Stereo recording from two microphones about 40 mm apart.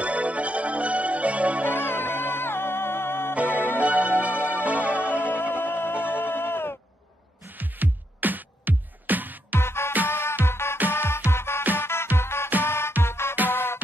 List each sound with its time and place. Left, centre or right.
0.0 s music: right
2.1 s music: left
3.3 s music: right
5.6 s music: left
6.1 s bleat: left
7.5 s music: right
9.6 s music: left
10.0 s music: left
10.4 s music: left
13.5 s music: left